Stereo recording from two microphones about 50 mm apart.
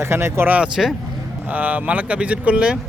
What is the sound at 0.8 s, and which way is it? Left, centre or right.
Speech, centre.